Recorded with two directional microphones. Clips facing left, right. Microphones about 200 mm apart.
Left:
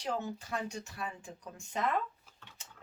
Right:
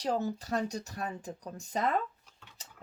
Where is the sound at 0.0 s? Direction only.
35° right (ahead or behind).